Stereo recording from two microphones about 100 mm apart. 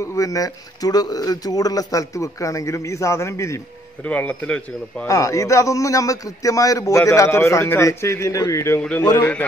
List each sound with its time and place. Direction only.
0.0 s a man's voice: 30° left (ahead or behind)
4.0 s speech: 15° left (ahead or behind)
5.0 s a man's voice: 30° left (ahead or behind)
9.2 s speech: 15° left (ahead or behind)